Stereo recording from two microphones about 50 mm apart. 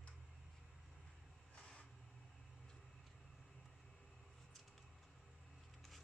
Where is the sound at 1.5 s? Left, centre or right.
Centre.